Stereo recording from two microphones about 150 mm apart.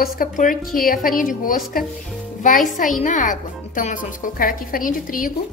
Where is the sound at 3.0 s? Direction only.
60° left (ahead or behind).